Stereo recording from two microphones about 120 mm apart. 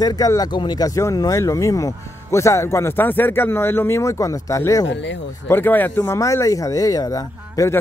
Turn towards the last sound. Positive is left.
turn(degrees=30)  # may be behind; listen again after turning